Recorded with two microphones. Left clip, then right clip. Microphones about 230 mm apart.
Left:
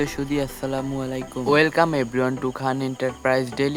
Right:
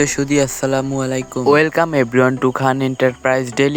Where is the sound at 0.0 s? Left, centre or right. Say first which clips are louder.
Right 9 dB; right.